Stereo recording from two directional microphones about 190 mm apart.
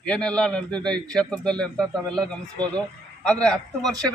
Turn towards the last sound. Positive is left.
turn(degrees=5)  # may be behind; listen again after turning